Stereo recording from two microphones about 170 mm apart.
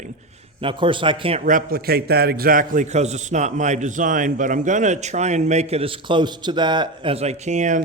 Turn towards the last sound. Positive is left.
turn(degrees=-45)  # may be behind; listen again after turning